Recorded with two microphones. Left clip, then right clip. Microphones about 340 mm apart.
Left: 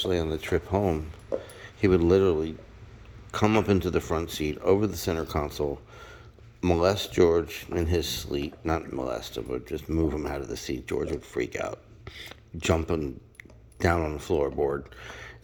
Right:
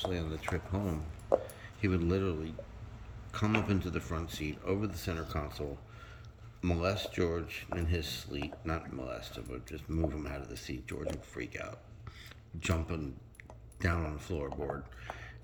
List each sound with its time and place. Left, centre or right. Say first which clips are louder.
0.0 s speech: left 9 dB; centre